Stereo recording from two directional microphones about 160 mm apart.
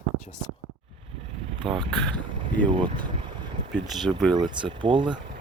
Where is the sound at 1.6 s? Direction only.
30° right (ahead or behind).